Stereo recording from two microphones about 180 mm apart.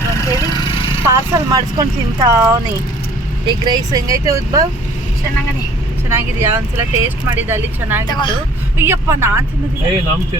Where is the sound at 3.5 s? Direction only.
25° right (ahead or behind).